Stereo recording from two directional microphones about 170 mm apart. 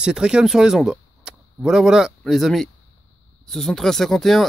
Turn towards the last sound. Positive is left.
turn(degrees=0)  # may be behind; listen again after turning